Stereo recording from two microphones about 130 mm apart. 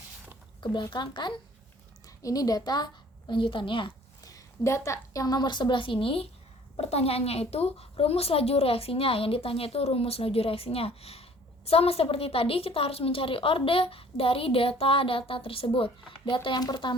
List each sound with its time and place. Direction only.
0.6 s a woman's voice: 35° left (ahead or behind)
4.2 s a woman's voice: 25° left (ahead or behind)